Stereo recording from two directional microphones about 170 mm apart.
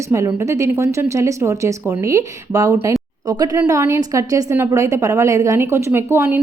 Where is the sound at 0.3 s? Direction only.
15° right (ahead or behind).